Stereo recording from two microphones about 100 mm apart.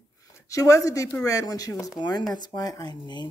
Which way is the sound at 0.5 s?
30° left (ahead or behind).